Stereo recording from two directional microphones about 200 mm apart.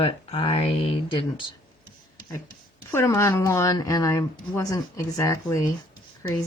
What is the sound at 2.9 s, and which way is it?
Speech, 15° left (ahead or behind).